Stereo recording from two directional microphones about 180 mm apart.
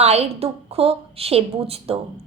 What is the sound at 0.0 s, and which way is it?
A woman's voice, 35° right (ahead or behind).